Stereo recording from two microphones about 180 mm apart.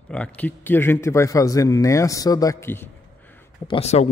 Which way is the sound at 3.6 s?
35° left (ahead or behind).